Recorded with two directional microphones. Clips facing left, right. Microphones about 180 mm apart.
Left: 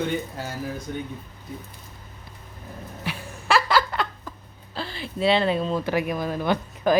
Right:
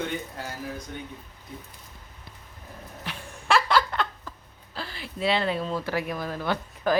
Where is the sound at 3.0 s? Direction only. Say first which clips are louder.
Left 2 dB; 5° left (ahead or behind).